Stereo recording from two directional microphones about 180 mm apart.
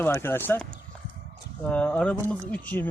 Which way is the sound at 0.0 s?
10° left (ahead or behind).